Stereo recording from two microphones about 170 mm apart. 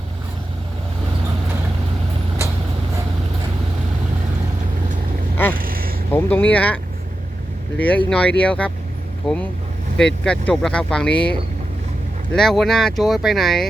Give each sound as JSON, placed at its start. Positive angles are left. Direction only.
{"t": 5.5, "sound": "a sound", "side_deg": -55}
{"t": 6.1, "sound": "speech", "side_deg": 10}
{"t": 7.8, "sound": "speech", "side_deg": 10}